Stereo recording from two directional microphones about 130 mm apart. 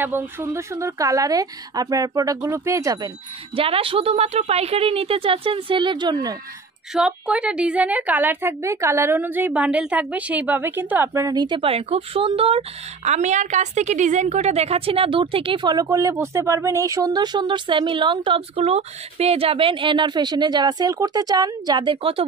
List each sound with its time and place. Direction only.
0.0 s speech: 15° right (ahead or behind)
3.5 s a woman's voice: 45° right (ahead or behind)
6.9 s a woman's voice: 5° right (ahead or behind)
11.2 s speech: 35° right (ahead or behind)